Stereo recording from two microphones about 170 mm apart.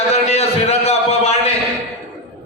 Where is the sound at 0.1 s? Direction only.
35° left (ahead or behind).